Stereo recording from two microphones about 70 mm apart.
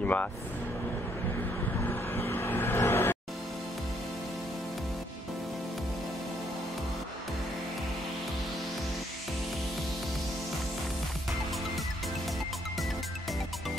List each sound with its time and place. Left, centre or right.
0.0 s speech: left
2.1 s vehicle: left
2.9 s music: left